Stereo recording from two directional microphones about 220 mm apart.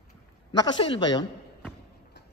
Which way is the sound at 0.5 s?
20° left (ahead or behind).